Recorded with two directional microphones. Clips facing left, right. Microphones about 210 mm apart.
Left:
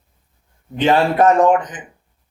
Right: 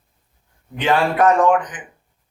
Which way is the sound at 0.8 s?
25° left (ahead or behind).